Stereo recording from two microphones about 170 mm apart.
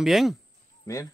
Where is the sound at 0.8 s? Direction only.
20° left (ahead or behind).